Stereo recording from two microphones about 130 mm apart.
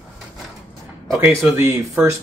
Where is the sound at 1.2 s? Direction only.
10° right (ahead or behind).